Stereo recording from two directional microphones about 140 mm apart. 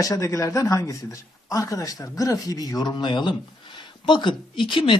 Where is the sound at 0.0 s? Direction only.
20° left (ahead or behind).